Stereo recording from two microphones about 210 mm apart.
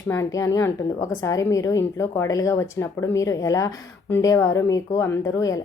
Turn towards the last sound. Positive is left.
turn(degrees=15)  # may be behind; listen again after turning